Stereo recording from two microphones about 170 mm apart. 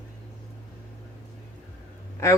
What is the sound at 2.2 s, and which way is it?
Speech, 15° left (ahead or behind).